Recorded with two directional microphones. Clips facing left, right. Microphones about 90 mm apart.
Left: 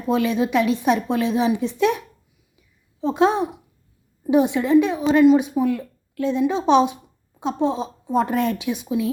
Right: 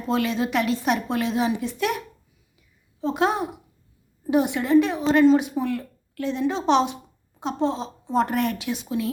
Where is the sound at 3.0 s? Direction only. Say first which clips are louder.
Left 4 dB; 20° left (ahead or behind).